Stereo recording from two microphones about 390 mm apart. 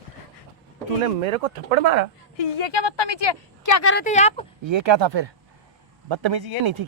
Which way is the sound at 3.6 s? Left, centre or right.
Left.